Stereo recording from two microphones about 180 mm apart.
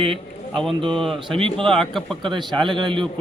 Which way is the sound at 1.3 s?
30° right (ahead or behind).